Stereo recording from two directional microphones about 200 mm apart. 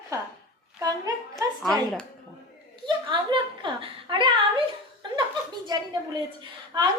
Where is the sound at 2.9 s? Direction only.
25° right (ahead or behind).